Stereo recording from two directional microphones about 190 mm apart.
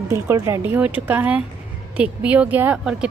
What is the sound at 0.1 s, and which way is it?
Speech, 15° right (ahead or behind).